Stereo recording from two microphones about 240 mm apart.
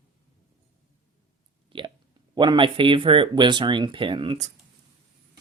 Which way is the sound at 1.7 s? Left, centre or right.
Right.